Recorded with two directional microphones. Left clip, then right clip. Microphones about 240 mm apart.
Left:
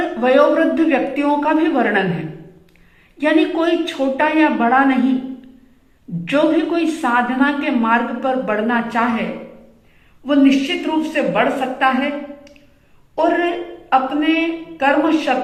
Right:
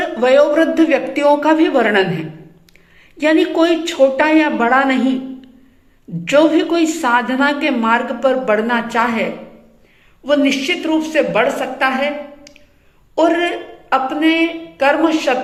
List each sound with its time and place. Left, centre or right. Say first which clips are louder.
0.2 s speech: right 2 dB; right
3.2 s speech: right 3 dB; right
6.2 s speech: right 4 dB; right
10.2 s a woman's voice: right 1 dB; right